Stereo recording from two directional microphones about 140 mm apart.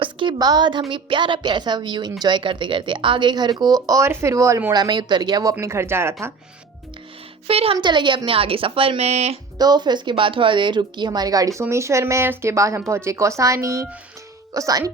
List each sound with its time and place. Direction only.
0.0 s a woman's voice: 35° right (ahead or behind); by 6.3 s 20° right (ahead or behind)
7.4 s a woman's voice: 45° right (ahead or behind)
9.6 s speech: 30° right (ahead or behind)